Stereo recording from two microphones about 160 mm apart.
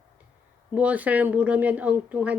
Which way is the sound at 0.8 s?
10° right (ahead or behind).